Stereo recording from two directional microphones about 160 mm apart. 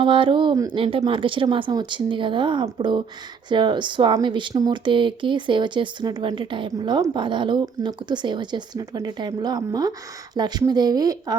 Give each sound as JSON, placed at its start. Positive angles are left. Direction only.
{"t": 0.0, "sound": "speech", "side_deg": -30}